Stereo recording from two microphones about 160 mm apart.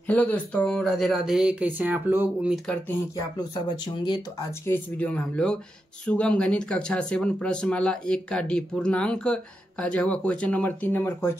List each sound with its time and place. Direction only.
0.0 s speech: 10° left (ahead or behind); by 2.5 s 10° right (ahead or behind)
2.5 s speech: centre (ahead or behind)
3.3 s speech: 25° left (ahead or behind)
4.5 s speech: 15° left (ahead or behind)